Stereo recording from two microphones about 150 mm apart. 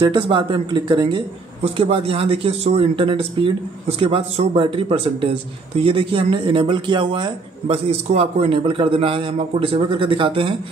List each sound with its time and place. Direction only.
0.0 s speech: 30° right (ahead or behind)